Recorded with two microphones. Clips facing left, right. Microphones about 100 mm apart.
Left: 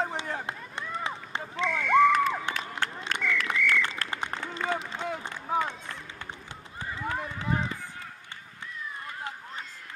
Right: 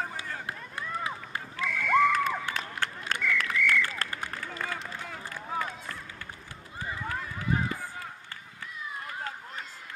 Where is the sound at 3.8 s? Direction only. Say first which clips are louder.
Left 1 dB; 25° left (ahead or behind).